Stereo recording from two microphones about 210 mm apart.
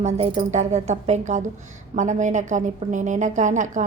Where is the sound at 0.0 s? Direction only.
30° right (ahead or behind).